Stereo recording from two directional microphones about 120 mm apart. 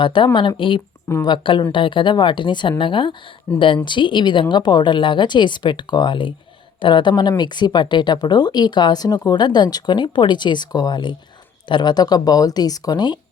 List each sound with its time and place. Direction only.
0.0 s a woman's voice: 40° left (ahead or behind)